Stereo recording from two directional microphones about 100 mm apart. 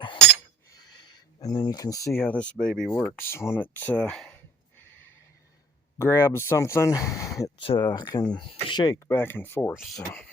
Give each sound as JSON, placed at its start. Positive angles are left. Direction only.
{"t": 0.9, "sound": "a sound", "side_deg": 40}
{"t": 2.1, "sound": "speech", "side_deg": 15}
{"t": 3.2, "sound": "speech", "side_deg": 25}
{"t": 6.0, "sound": "speech", "side_deg": 25}
{"t": 7.6, "sound": "speech", "side_deg": 70}
{"t": 7.9, "sound": "speech", "side_deg": 45}
{"t": 8.4, "sound": "speech", "side_deg": 55}
{"t": 9.0, "sound": "speech", "side_deg": 20}